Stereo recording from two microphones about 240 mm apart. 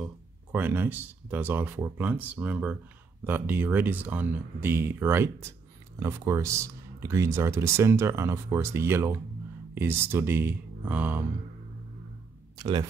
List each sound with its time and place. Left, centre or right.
0.0 s speech: centre
12.5 s speech: centre